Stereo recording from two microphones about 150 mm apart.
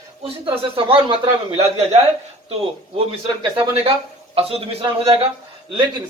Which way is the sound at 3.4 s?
30° right (ahead or behind).